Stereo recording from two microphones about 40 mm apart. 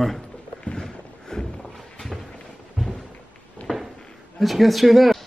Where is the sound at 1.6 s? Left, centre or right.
Centre.